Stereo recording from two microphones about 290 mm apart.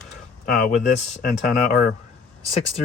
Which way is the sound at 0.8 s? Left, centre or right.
Left.